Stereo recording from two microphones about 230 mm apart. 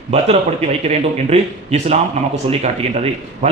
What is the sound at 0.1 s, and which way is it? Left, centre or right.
A man's voice, right.